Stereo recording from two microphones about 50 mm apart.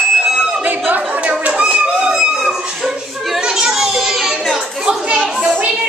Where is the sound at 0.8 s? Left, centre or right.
Right; by 2.6 s centre.